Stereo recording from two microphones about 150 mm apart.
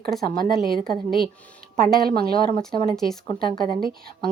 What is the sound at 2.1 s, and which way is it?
Speech, 90° right.